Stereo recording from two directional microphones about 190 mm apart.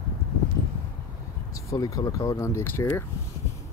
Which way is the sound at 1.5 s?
20° left (ahead or behind).